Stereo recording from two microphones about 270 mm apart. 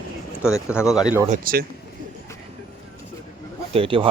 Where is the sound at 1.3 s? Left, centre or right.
Right.